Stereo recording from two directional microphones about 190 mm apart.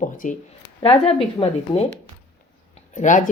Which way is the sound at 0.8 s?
30° left (ahead or behind).